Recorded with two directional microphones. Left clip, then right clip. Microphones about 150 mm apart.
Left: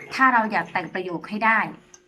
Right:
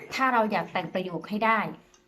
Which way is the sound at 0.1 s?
20° right (ahead or behind).